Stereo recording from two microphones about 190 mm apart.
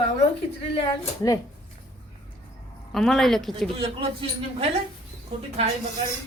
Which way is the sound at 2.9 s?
Centre (ahead or behind).